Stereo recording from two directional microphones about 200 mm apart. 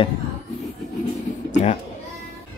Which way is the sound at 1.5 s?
35° left (ahead or behind).